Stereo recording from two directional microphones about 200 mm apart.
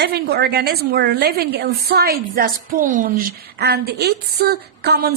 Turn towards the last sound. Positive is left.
turn(degrees=-50)  # may be behind; listen again after turning